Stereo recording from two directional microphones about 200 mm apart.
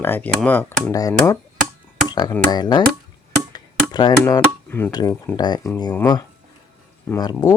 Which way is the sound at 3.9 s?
20° left (ahead or behind).